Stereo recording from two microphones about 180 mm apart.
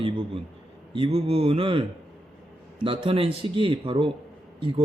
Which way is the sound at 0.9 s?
30° right (ahead or behind).